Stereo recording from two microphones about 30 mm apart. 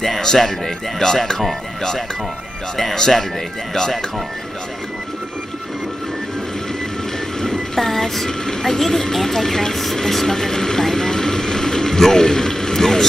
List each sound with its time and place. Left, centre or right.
0.9 s speech: centre
2.8 s speech: centre
7.3 s train: left
7.7 s train: centre
8.3 s speech: centre